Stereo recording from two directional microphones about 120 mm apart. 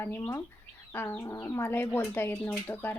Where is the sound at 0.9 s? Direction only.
20° left (ahead or behind).